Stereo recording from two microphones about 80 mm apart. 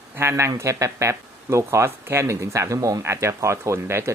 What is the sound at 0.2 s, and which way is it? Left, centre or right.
Speech, right.